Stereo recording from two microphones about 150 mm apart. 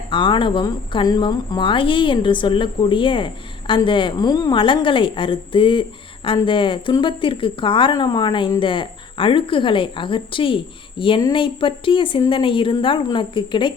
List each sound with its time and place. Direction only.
0.1 s a woman's voice: 35° left (ahead or behind)